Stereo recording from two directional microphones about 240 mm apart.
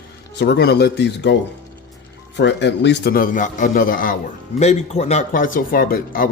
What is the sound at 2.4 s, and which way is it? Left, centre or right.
Speech, left.